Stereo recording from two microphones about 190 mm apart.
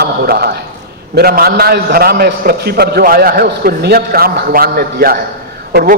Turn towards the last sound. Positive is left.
turn(degrees=-55)  # may be behind; listen again after turning